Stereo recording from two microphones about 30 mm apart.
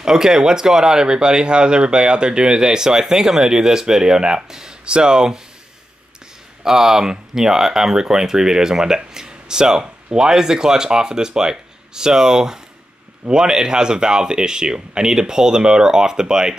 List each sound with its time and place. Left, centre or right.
0.0 s speech: centre
4.8 s speech: right
6.6 s speech: centre